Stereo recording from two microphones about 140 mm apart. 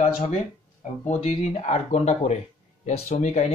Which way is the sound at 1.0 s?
50° left (ahead or behind).